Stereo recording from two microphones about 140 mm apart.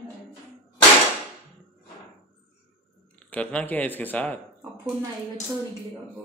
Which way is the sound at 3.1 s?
10° left (ahead or behind).